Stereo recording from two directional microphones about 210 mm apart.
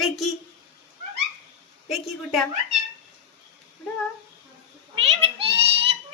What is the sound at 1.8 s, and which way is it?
Speech, centre (ahead or behind).